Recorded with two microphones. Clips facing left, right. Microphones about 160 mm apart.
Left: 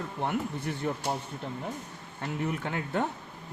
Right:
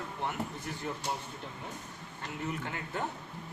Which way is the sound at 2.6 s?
65° left (ahead or behind).